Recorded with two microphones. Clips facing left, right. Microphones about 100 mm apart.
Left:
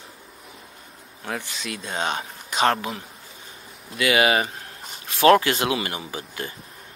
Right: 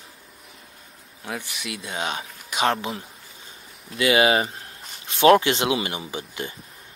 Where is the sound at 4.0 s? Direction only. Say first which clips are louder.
Right 1 dB; 25° right (ahead or behind).